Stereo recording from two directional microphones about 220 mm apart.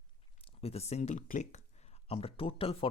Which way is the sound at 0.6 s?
30° left (ahead or behind).